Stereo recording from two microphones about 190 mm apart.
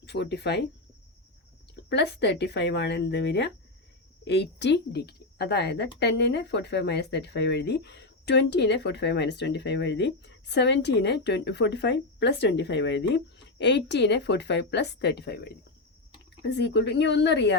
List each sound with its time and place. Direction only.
0.0 s speech: 60° left (ahead or behind)
1.7 s speech: 60° left (ahead or behind)